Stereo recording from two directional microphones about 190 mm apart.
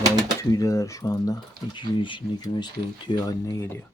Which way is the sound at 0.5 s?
15° left (ahead or behind).